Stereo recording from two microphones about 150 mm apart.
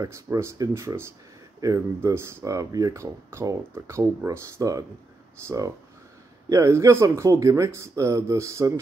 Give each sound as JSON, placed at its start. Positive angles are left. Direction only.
{"t": 0.0, "sound": "speech", "side_deg": -20}